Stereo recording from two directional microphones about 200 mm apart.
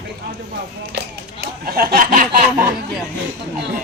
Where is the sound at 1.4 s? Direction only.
45° right (ahead or behind).